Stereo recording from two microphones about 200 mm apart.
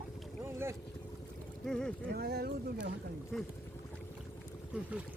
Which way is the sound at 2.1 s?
50° right (ahead or behind).